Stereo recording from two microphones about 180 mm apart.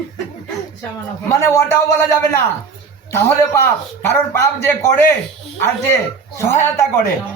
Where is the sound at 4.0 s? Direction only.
10° left (ahead or behind).